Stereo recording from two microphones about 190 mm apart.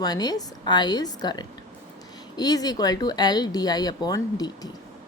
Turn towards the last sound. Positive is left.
turn(degrees=20)  # may be behind; listen again after turning